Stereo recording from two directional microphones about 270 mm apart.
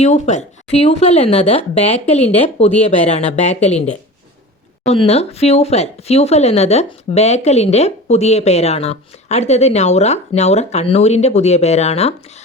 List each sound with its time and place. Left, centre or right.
0.0 s speech: left
4.9 s speech: left